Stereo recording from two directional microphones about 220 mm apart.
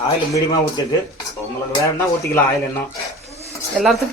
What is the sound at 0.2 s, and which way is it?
Speech, 15° left (ahead or behind).